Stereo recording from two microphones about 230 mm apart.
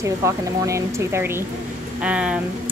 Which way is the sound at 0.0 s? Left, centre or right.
Centre.